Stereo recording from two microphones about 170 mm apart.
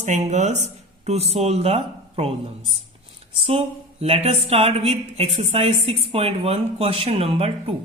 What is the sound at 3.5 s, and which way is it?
A woman's voice, 35° right (ahead or behind).